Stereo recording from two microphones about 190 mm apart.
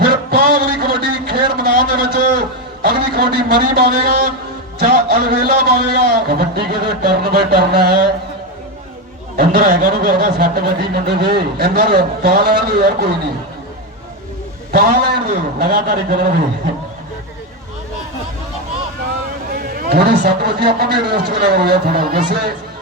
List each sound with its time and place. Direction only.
0.0 s a sound: 55° right (ahead or behind)
2.8 s a man's voice: 55° right (ahead or behind)
9.4 s speech: 55° right (ahead or behind)
14.7 s a man's voice: 55° right (ahead or behind)
19.5 s speech: 50° right (ahead or behind)